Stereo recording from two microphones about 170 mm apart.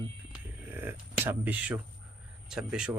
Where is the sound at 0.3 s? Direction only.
10° right (ahead or behind).